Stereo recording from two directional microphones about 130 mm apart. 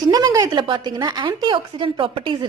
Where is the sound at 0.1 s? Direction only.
30° right (ahead or behind).